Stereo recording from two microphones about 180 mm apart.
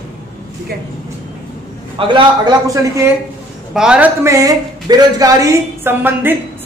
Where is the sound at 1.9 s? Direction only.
30° right (ahead or behind).